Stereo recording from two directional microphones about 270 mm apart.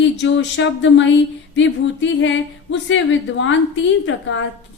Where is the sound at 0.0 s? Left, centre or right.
Left.